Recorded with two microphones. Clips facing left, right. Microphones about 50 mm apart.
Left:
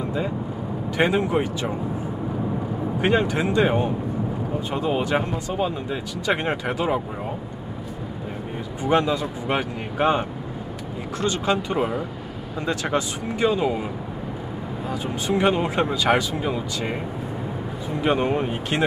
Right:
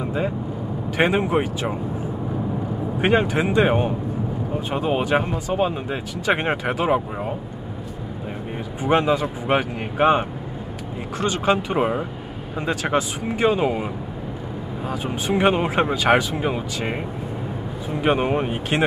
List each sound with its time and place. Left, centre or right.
0.0 s vehicle: right
0.9 s speech: right
3.0 s speech: centre
8.8 s speech: right
14.9 s speech: centre